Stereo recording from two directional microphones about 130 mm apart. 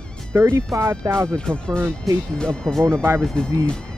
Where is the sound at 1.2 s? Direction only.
5° left (ahead or behind).